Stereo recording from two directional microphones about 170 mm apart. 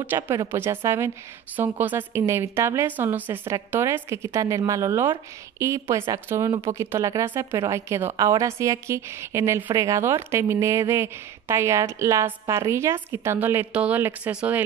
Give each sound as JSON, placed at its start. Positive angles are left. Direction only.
{"t": 0.0, "sound": "a woman's voice", "side_deg": -15}